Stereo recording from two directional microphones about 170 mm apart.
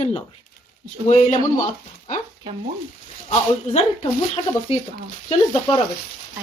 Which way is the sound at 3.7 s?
40° left (ahead or behind).